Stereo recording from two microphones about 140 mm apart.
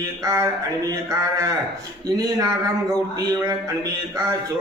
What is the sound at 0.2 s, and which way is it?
Speech, 25° right (ahead or behind).